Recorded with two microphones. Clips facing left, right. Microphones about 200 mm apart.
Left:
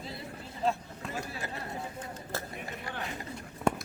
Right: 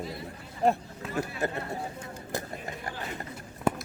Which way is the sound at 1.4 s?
55° right (ahead or behind).